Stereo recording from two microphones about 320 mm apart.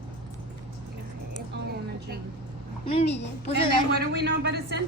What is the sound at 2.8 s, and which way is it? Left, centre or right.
Speech, centre.